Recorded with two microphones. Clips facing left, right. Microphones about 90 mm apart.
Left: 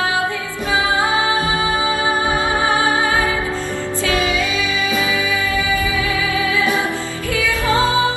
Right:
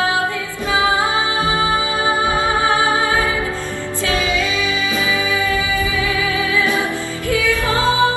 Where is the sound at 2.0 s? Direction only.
25° right (ahead or behind).